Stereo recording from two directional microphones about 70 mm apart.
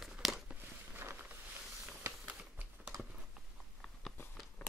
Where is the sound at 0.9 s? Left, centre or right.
Right.